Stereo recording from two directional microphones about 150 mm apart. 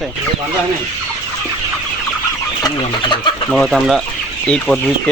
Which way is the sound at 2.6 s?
30° left (ahead or behind).